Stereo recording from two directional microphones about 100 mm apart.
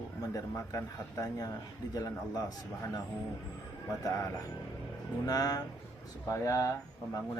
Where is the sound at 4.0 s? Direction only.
35° left (ahead or behind).